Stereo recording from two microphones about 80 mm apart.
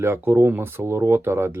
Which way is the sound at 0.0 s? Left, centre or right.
Right.